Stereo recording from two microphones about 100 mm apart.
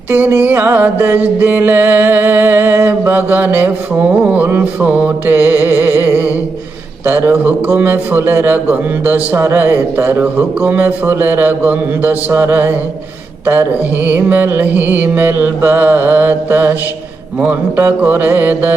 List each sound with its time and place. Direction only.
0.3 s music: 20° right (ahead or behind)
17.7 s music: 20° right (ahead or behind)